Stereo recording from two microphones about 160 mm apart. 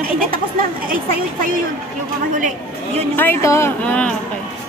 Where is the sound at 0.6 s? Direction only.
60° right (ahead or behind).